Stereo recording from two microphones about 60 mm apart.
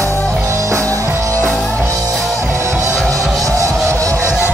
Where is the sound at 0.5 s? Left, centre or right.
Right.